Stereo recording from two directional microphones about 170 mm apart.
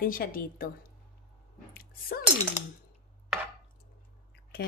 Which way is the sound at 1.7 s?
60° left (ahead or behind).